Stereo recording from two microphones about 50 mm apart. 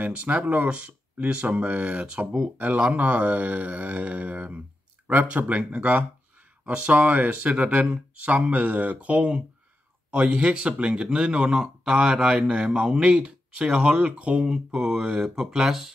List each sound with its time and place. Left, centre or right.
0.0 s speech: right
6.6 s speech: centre
6.9 s speech: right; by 15.9 s centre